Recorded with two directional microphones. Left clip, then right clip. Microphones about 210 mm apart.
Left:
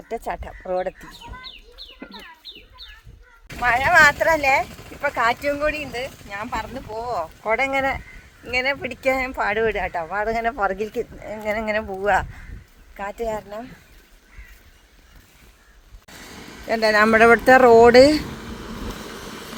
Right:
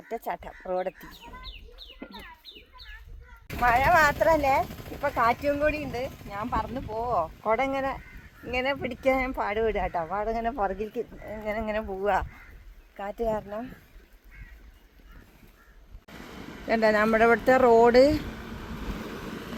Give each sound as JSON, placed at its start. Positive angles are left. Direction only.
{"t": 0.1, "sound": "speech", "side_deg": 0}
{"t": 3.6, "sound": "speech", "side_deg": -10}
{"t": 16.0, "sound": "a sound", "side_deg": 15}